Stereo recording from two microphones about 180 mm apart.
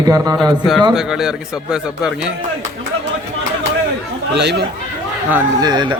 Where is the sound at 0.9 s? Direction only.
Centre (ahead or behind).